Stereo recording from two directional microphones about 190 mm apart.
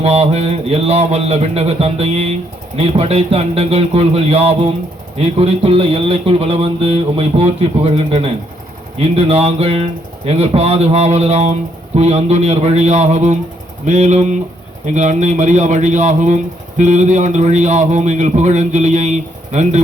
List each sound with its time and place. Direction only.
0.0 s speech: 30° right (ahead or behind)